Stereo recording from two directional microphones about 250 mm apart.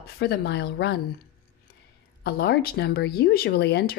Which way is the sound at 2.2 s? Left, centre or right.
Left.